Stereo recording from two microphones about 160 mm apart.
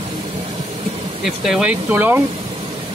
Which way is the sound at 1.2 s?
Centre (ahead or behind).